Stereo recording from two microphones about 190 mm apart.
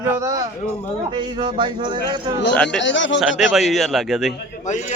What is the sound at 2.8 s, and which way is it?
Speech, 75° left (ahead or behind).